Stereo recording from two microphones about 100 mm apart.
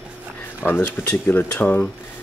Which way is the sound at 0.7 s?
25° left (ahead or behind).